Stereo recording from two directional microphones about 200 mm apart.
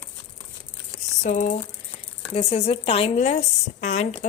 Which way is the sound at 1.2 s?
40° left (ahead or behind).